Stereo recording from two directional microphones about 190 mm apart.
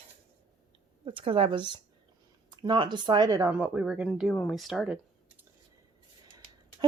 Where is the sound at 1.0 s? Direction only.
30° right (ahead or behind).